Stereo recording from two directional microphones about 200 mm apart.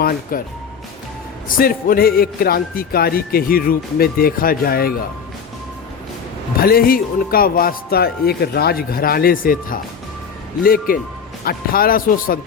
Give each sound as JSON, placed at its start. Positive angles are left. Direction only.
{"t": 0.0, "sound": "speech", "side_deg": 45}
{"t": 1.5, "sound": "a man's voice", "side_deg": 45}
{"t": 6.6, "sound": "a man's voice", "side_deg": 50}